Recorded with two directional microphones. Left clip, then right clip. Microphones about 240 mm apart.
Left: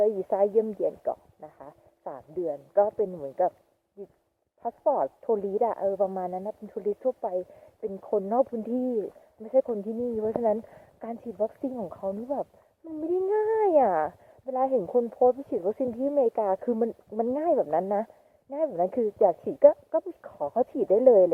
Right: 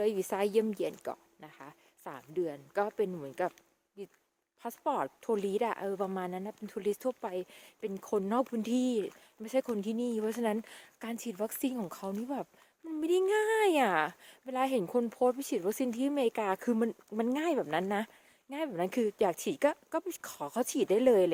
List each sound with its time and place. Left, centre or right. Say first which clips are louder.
0.0 s a woman's voice: left 7 dB; right
4.6 s a woman's voice: left 8 dB; right